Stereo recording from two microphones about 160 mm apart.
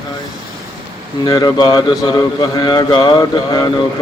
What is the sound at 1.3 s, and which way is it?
Speech, 25° left (ahead or behind).